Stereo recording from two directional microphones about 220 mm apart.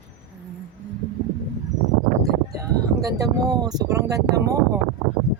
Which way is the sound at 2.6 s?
15° right (ahead or behind).